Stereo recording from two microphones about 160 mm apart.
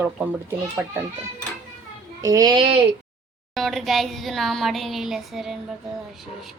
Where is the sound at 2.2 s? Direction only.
25° right (ahead or behind).